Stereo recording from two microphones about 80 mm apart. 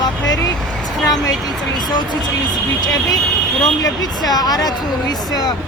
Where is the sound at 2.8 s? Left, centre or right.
Left.